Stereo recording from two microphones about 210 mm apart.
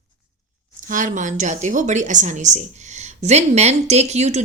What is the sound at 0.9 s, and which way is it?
A woman's voice, 35° right (ahead or behind).